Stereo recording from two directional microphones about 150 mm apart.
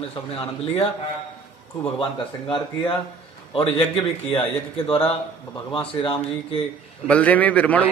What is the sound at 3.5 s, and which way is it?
A man's voice, 40° left (ahead or behind).